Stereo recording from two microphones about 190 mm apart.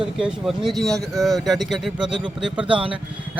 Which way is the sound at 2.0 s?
25° right (ahead or behind).